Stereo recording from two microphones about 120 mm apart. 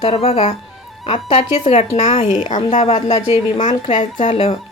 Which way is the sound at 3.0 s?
55° left (ahead or behind).